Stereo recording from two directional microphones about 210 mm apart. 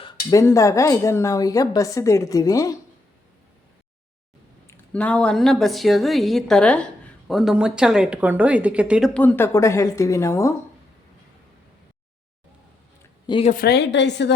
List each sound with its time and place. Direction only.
0.0 s speech: 15° left (ahead or behind)
4.6 s a woman's voice: 5° left (ahead or behind)
13.2 s a woman's voice: 25° left (ahead or behind)
13.5 s a woman's voice: 50° left (ahead or behind)